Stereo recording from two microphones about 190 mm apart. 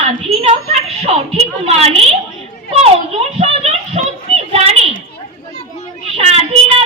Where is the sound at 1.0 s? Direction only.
30° right (ahead or behind).